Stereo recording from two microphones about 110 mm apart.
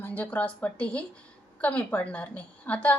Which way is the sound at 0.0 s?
15° left (ahead or behind).